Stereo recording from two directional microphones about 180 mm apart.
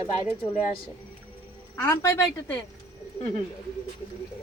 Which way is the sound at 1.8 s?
15° left (ahead or behind).